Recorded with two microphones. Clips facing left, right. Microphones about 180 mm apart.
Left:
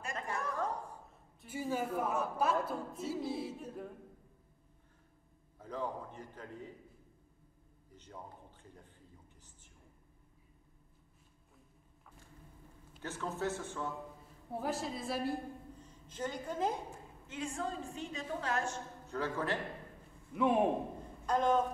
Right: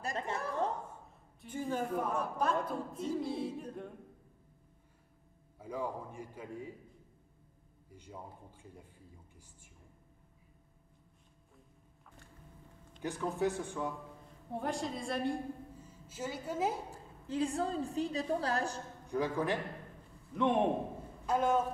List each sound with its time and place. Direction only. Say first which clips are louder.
0.3 s a sound: right 1 dB; 25° right (ahead or behind)
1.4 s a man's voice: right 1 dB; 5° left (ahead or behind)
5.6 s a man's voice: right 1 dB; 10° right (ahead or behind)
7.9 s a man's voice: right 2 dB; 10° right (ahead or behind)
13.0 s a man's voice: right 4 dB; 15° right (ahead or behind)
14.5 s a man's voice: right 1 dB; 5° left (ahead or behind)
15.8 s a woman's voice: left 5 dB; 5° right (ahead or behind)
16.9 s a woman's voice: right 8 dB; 35° right (ahead or behind)
19.0 s a man's voice: right 3 dB; 15° right (ahead or behind)
20.3 s a man's voice: even; 5° left (ahead or behind)
21.3 s a man's voice: even; 5° right (ahead or behind)